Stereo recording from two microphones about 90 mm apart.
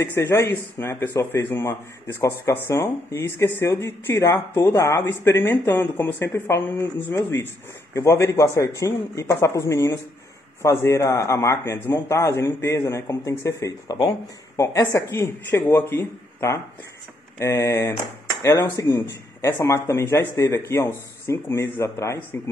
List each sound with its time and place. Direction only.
0.0 s speech: 30° left (ahead or behind)
14.9 s speech: 30° left (ahead or behind)